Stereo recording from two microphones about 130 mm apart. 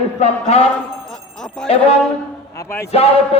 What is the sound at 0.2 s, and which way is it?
A man's voice, 55° left (ahead or behind).